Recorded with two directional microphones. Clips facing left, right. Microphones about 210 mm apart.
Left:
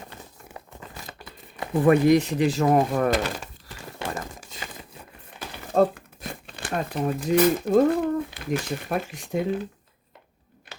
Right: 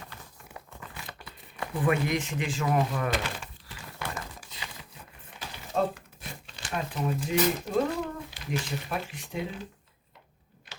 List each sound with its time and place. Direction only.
0.8 s crumpling: 40° left (ahead or behind)
1.7 s speech: 40° left (ahead or behind)
4.1 s crumpling: 45° left (ahead or behind)
5.5 s speech: 55° left (ahead or behind)